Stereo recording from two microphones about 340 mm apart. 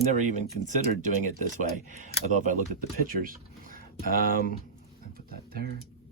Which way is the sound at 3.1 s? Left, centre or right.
Right.